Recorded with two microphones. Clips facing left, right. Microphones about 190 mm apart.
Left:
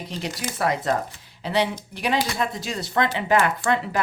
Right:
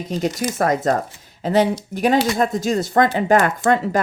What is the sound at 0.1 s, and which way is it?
Speech, 45° right (ahead or behind).